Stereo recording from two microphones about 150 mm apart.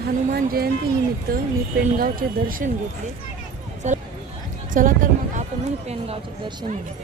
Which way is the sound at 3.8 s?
50° right (ahead or behind).